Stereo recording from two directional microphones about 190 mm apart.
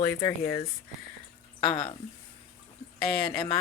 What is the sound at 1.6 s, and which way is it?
Speech, 25° left (ahead or behind).